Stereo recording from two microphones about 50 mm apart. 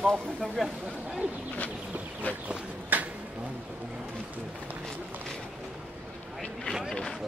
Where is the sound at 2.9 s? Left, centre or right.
Right.